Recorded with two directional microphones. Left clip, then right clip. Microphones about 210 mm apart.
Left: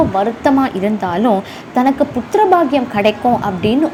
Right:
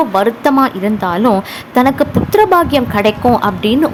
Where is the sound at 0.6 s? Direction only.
5° right (ahead or behind).